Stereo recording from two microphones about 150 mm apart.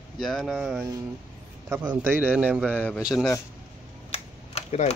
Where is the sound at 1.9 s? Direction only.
10° right (ahead or behind).